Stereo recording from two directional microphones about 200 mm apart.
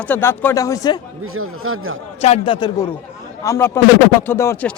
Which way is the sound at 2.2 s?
30° left (ahead or behind).